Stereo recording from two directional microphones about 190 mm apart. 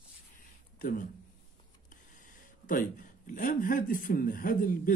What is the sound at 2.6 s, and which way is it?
Speech, 45° left (ahead or behind).